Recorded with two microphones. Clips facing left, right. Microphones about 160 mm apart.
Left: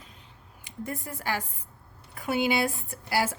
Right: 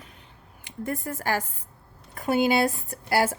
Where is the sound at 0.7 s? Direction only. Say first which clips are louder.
Right 5 dB; 50° right (ahead or behind).